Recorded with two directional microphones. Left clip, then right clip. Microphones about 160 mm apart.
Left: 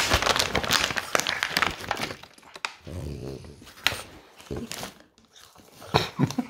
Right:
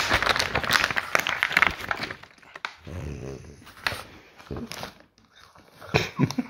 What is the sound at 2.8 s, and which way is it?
Dog, 15° left (ahead or behind).